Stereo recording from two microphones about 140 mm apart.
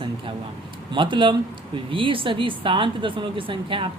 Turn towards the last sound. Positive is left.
turn(degrees=-40)  # may be behind; listen again after turning